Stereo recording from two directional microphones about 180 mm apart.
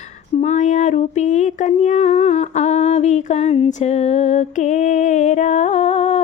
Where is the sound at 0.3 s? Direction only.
40° left (ahead or behind).